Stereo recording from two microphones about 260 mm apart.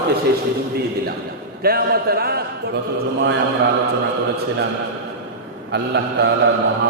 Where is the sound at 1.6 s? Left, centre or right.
Right.